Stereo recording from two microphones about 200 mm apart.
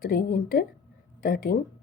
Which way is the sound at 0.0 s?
50° left (ahead or behind).